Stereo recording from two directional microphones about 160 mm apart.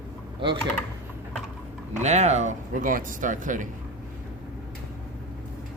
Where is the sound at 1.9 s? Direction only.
45° right (ahead or behind).